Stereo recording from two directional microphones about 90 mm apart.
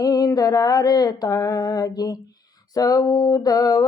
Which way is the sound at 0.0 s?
40° left (ahead or behind).